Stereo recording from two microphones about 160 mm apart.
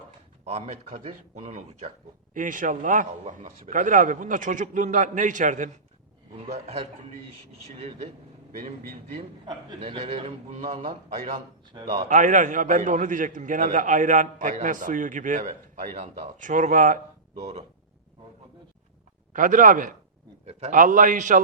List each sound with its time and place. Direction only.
0.4 s a man's voice: 45° right (ahead or behind)
2.3 s a man's voice: 55° right (ahead or behind)
6.3 s a man's voice: 40° right (ahead or behind)
8.5 s a man's voice: 55° right (ahead or behind)
9.8 s a man's voice: 35° right (ahead or behind)
11.7 s a man's voice: 25° right (ahead or behind)
12.0 s a man's voice: 55° right (ahead or behind)
19.3 s a man's voice: 55° right (ahead or behind)
20.5 s a man's voice: 40° right (ahead or behind)
20.7 s a man's voice: 55° right (ahead or behind)